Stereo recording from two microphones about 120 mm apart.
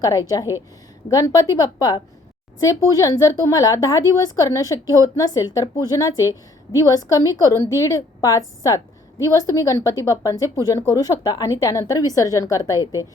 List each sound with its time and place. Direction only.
0.0 s a woman's voice: 30° left (ahead or behind)